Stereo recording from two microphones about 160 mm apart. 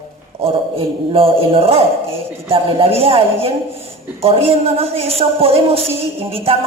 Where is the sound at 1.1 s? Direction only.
35° right (ahead or behind).